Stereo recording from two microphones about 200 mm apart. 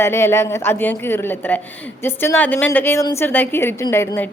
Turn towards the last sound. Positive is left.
turn(degrees=15)  # may be behind; listen again after turning